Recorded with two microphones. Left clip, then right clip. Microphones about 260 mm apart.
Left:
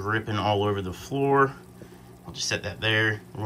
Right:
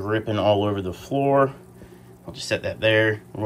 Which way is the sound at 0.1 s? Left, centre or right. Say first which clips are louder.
Right 5 dB; centre.